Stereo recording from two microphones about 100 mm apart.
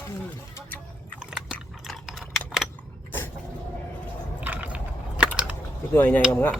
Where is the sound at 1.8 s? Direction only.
Centre (ahead or behind).